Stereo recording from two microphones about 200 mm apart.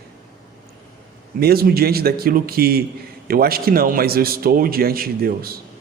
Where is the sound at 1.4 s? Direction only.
50° right (ahead or behind).